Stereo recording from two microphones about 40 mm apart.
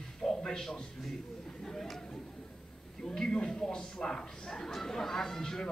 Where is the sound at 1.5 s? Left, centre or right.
Centre.